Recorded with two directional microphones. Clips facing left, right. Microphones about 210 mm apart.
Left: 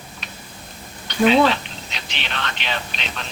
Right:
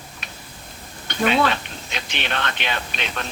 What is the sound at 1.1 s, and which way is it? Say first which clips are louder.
Speech: left 4 dB; 50° right (ahead or behind).